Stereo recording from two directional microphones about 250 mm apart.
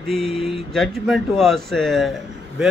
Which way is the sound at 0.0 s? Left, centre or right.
Centre.